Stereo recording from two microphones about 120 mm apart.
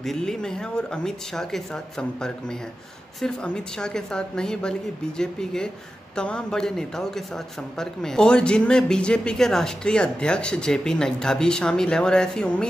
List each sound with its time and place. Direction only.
0.0 s a man's voice: 5° left (ahead or behind)